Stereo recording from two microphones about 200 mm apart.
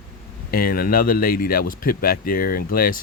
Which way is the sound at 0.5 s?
45° left (ahead or behind).